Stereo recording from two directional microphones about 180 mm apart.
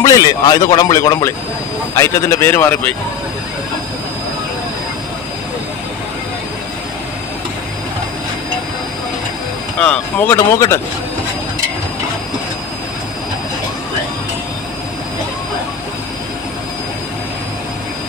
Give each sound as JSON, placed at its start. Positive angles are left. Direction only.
{"t": 0.0, "sound": "a man's voice", "side_deg": 20}
{"t": 9.8, "sound": "speech", "side_deg": 5}